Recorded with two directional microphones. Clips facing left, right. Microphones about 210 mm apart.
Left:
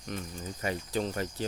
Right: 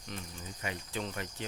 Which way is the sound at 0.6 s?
40° left (ahead or behind).